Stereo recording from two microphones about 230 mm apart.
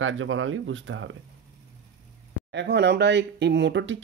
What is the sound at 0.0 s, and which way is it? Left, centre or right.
Speech, right.